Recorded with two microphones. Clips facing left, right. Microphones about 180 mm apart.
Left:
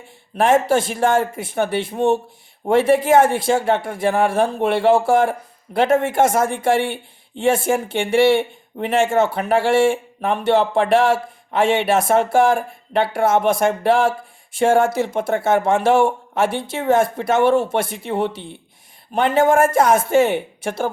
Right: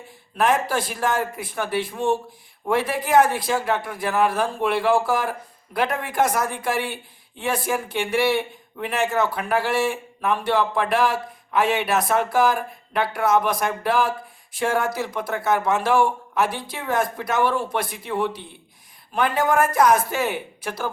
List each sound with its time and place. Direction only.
0.3 s speech: 25° left (ahead or behind)